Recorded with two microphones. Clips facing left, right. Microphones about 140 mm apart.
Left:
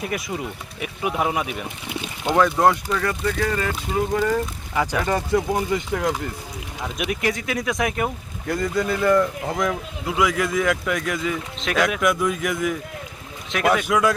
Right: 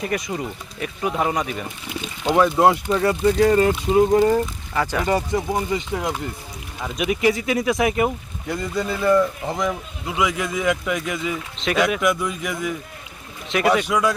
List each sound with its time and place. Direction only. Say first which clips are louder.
0.0 s speech: right 2 dB; centre (ahead or behind)
2.2 s speech: right 1 dB; 15° right (ahead or behind)
2.9 s speech: right 5 dB; 25° right (ahead or behind)
4.7 s speech: left 1 dB; 10° left (ahead or behind)
5.5 s speech: even; 15° right (ahead or behind)
6.9 s speech: right 5 dB; centre (ahead or behind)